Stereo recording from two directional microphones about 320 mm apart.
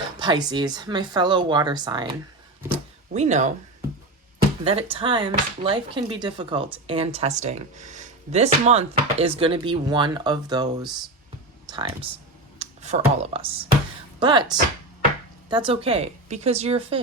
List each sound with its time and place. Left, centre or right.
0.2 s speech: centre
2.7 s a sound: right
4.6 s speech: centre
12.5 s speech: centre